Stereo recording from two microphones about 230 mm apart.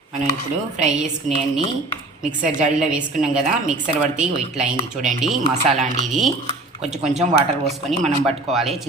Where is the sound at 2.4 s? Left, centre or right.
Right.